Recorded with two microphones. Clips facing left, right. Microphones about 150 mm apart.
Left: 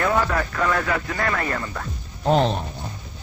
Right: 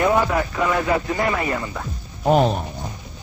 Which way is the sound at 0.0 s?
15° right (ahead or behind).